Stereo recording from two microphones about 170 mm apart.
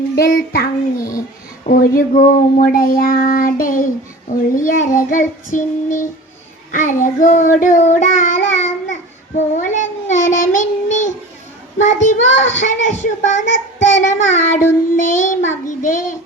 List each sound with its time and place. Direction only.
0.2 s child singing: 65° left (ahead or behind)